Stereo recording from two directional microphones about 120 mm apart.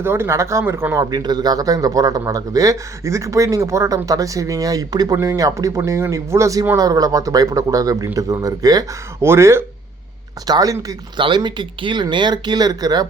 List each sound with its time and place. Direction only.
0.0 s speech: 20° right (ahead or behind)
1.1 s speech: 35° right (ahead or behind)
11.2 s speech: 40° right (ahead or behind)